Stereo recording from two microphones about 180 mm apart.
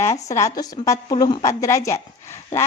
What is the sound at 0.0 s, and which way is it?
Speech, 15° left (ahead or behind).